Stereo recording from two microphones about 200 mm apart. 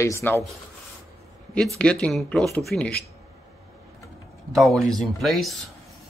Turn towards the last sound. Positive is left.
turn(degrees=0)  # may be behind; listen again after turning